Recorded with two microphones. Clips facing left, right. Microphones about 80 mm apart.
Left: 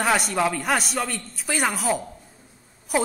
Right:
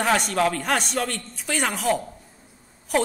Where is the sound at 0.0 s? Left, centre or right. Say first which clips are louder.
Right 1 dB; centre.